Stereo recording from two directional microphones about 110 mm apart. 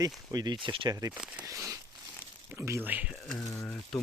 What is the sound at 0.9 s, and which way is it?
Speech, 30° right (ahead or behind).